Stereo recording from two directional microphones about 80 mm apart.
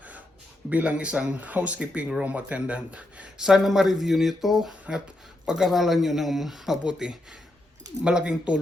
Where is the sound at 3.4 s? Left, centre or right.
Centre.